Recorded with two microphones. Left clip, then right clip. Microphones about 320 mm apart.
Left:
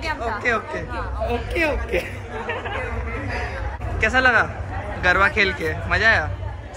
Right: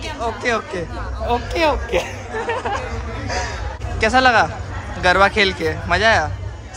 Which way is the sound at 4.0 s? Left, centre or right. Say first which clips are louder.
Right 3 dB; centre.